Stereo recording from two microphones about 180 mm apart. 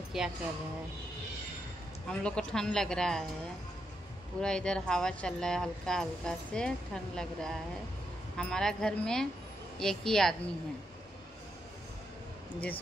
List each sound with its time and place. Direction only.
0.1 s speech: centre (ahead or behind)
2.0 s speech: 5° left (ahead or behind)
4.4 s speech: 5° left (ahead or behind)